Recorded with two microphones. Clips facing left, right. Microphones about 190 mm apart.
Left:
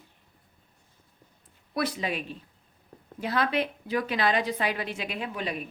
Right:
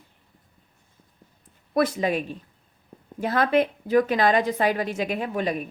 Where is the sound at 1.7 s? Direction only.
45° right (ahead or behind).